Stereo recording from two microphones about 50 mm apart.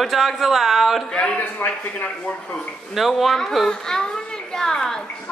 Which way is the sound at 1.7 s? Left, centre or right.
Left.